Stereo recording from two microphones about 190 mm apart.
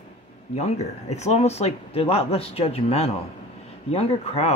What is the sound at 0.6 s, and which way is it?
Speech, 35° left (ahead or behind).